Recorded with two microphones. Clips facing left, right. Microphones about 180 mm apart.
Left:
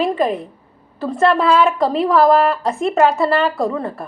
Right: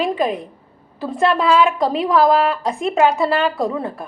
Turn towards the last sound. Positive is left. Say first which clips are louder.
# left 1 dB
turn(degrees=0)  # may be behind; listen again after turning